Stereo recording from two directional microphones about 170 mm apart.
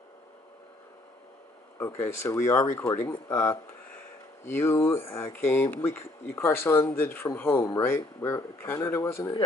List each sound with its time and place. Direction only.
2.0 s a man's voice: 15° left (ahead or behind)